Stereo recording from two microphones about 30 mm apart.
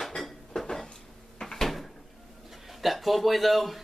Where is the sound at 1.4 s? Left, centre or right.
Centre.